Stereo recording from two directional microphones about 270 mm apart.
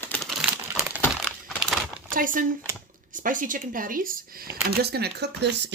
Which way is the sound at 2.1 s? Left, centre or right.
Right.